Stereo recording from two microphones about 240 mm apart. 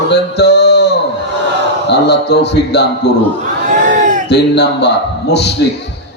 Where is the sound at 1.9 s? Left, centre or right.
Left.